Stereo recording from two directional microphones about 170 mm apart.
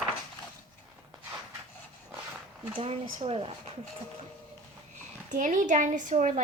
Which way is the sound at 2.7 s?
35° right (ahead or behind).